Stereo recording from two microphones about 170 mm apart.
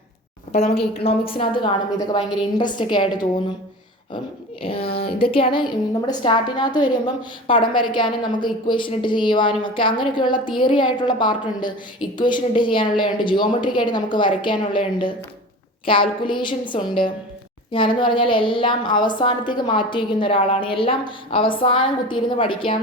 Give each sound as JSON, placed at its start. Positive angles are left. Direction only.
{"t": 0.5, "sound": "a woman's voice", "side_deg": 35}
{"t": 4.6, "sound": "a woman's voice", "side_deg": 35}